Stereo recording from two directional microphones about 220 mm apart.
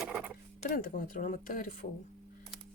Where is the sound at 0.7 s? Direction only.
40° left (ahead or behind).